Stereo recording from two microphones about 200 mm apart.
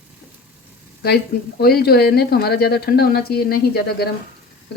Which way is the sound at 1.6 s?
50° left (ahead or behind).